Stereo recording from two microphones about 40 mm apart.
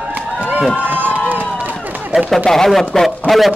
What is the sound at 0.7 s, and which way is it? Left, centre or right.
Speech, right.